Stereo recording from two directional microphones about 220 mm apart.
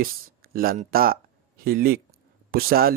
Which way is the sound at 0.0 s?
40° right (ahead or behind).